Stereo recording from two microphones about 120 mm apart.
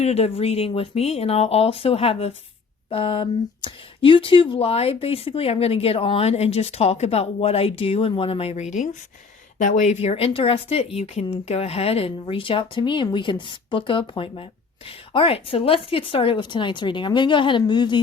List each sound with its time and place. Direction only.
0.0 s speech: 60° left (ahead or behind); by 18.0 s 40° left (ahead or behind)